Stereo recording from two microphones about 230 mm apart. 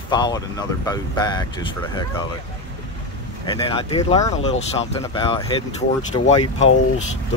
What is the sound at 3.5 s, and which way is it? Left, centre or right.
Speech, left.